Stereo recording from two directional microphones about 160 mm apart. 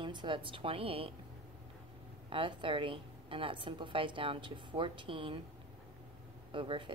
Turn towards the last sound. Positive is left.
turn(degrees=-30)  # may be behind; listen again after turning